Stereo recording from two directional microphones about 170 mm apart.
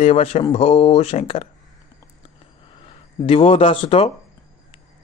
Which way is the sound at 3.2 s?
35° left (ahead or behind).